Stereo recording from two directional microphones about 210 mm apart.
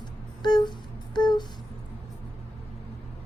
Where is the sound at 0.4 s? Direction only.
20° left (ahead or behind).